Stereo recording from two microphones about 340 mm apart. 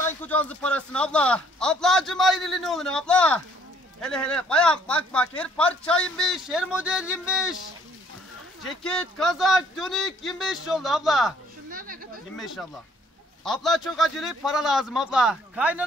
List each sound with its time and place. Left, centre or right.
0.0 s a man's voice: centre
8.6 s a man's voice: centre
11.7 s a sound: right
13.4 s a man's voice: centre